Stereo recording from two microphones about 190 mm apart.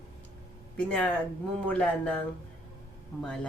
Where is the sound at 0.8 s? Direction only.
5° left (ahead or behind).